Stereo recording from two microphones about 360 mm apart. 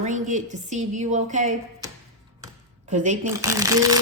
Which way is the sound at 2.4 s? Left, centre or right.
Centre.